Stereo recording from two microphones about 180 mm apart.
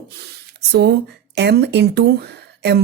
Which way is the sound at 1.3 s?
65° right (ahead or behind).